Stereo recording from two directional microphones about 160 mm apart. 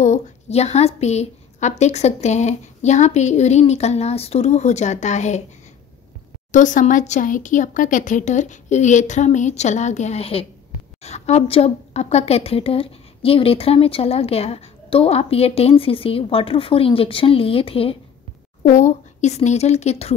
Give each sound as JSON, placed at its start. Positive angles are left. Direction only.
{"t": 0.0, "sound": "a woman's voice", "side_deg": 45}
{"t": 6.5, "sound": "a woman's voice", "side_deg": 50}
{"t": 18.6, "sound": "a woman's voice", "side_deg": 50}